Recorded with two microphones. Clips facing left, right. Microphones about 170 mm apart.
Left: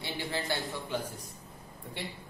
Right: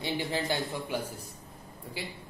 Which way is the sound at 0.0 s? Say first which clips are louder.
Right 4 dB; 15° right (ahead or behind).